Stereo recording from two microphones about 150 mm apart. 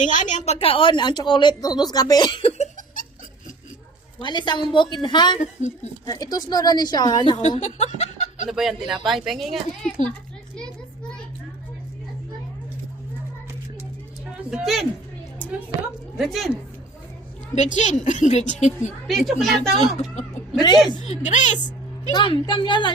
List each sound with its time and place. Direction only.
0.0 s speech: 55° left (ahead or behind)
4.2 s a woman's voice: 30° left (ahead or behind)
5.4 s a woman's voice: 50° left (ahead or behind)
6.1 s a woman's voice: 25° left (ahead or behind)
7.6 s speech: 50° left (ahead or behind)
8.4 s speech: centre (ahead or behind)
14.5 s speech: centre (ahead or behind)
16.1 s speech: centre (ahead or behind)
17.5 s a woman's voice: 50° left (ahead or behind)
19.0 s speech: centre (ahead or behind)
20.0 s a woman's voice: 50° left (ahead or behind)
20.6 s a woman's voice: 30° left (ahead or behind)
21.0 s a woman's voice: 50° left (ahead or behind)
22.1 s speech: 35° left (ahead or behind)